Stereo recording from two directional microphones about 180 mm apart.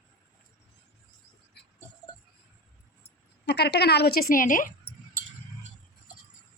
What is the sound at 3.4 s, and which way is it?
A woman's voice, 65° left (ahead or behind).